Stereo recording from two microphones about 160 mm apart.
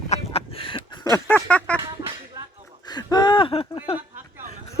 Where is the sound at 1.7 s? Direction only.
20° right (ahead or behind).